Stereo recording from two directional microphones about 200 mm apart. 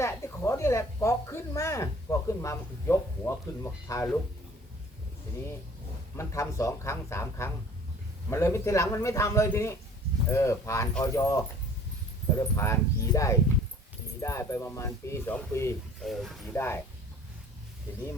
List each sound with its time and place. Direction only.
0.0 s speech: 15° left (ahead or behind)
6.1 s speech: 15° left (ahead or behind)
16.0 s speech: centre (ahead or behind)
16.6 s speech: 10° left (ahead or behind)